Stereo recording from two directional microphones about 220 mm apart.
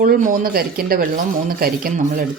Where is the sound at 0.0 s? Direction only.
40° right (ahead or behind).